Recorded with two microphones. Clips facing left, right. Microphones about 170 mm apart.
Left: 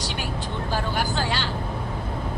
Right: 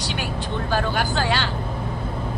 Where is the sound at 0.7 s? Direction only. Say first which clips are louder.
Right 3 dB; 70° right (ahead or behind).